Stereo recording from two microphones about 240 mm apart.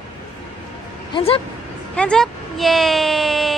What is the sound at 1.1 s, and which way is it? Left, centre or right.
Speech, left.